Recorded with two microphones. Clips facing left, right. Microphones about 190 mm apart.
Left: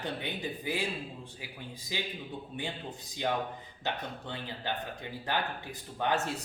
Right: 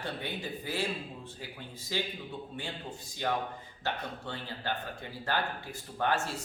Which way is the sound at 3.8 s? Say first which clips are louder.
Even; 15° left (ahead or behind).